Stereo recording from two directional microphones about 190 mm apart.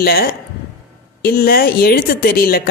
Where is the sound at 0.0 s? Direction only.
55° left (ahead or behind).